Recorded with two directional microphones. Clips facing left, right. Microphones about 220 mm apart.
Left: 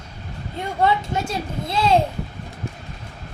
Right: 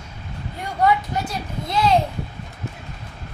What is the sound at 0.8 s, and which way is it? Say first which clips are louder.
Speech: right 1 dB; 25° left (ahead or behind).